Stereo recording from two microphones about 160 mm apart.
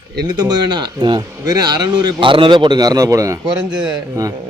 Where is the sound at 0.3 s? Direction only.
25° right (ahead or behind).